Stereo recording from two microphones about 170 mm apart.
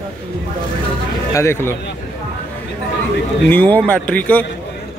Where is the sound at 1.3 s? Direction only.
15° left (ahead or behind).